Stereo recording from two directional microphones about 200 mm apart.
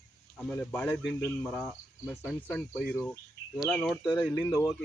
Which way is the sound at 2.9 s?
10° left (ahead or behind).